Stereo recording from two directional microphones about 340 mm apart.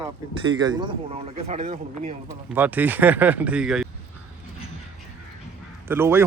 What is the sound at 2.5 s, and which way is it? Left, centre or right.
Speech, centre.